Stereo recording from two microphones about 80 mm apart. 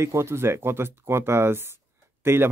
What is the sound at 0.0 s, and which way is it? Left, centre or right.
Speech, right.